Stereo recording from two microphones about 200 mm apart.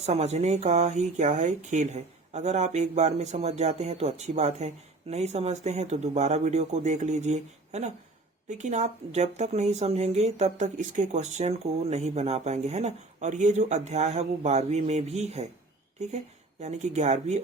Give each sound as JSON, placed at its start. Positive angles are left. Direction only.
{"t": 0.0, "sound": "a woman's voice", "side_deg": -35}